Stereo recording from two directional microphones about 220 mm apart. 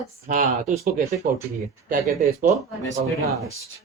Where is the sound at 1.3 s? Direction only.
35° right (ahead or behind).